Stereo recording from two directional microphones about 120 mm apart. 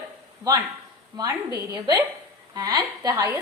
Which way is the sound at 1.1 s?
30° right (ahead or behind).